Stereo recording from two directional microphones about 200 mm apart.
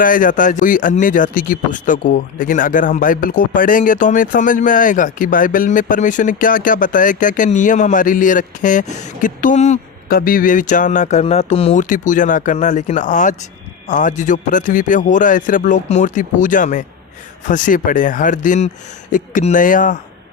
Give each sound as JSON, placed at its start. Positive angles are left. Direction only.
{"t": 0.0, "sound": "a man's voice", "side_deg": 40}